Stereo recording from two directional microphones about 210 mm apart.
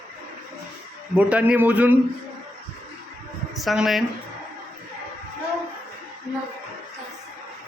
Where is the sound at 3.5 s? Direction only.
Centre (ahead or behind).